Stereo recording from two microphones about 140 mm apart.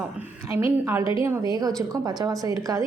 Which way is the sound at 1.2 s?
15° right (ahead or behind).